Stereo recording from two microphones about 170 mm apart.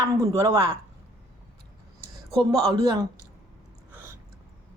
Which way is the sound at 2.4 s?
25° right (ahead or behind).